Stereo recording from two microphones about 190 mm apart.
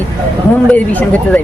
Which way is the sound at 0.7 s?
5° left (ahead or behind).